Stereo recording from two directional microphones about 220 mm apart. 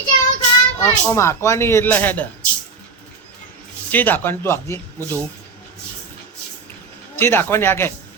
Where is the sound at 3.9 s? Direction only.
10° left (ahead or behind).